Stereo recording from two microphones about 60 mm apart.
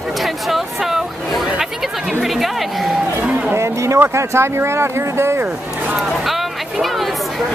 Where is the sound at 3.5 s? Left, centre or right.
Right.